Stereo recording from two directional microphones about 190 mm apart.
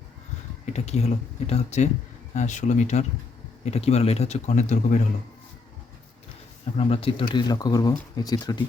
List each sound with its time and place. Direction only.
0.6 s a man's voice: 35° left (ahead or behind)
6.7 s speech: 30° left (ahead or behind)